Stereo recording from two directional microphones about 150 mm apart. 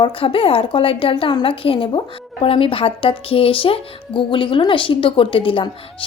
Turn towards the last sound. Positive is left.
turn(degrees=35)  # may be behind; listen again after turning